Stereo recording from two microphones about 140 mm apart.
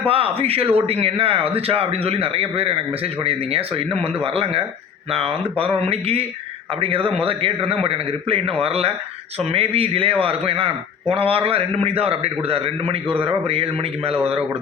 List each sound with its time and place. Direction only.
0.0 s a man's voice: 40° right (ahead or behind)